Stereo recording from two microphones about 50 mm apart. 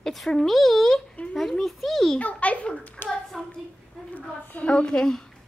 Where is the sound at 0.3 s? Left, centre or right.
Centre.